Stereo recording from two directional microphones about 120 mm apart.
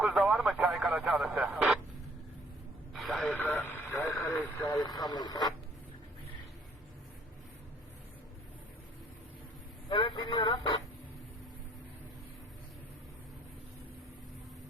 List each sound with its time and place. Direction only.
0.0 s radio: 5° right (ahead or behind)
2.9 s radio: centre (ahead or behind)
3.3 s vehicle: 15° left (ahead or behind)
4.9 s radio: 35° left (ahead or behind)
9.9 s vehicle: 45° left (ahead or behind)